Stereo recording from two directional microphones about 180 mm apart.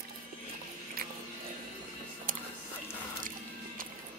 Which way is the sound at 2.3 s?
50° right (ahead or behind).